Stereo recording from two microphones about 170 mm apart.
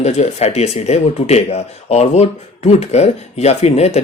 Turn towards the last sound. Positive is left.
turn(degrees=40)  # may be behind; listen again after turning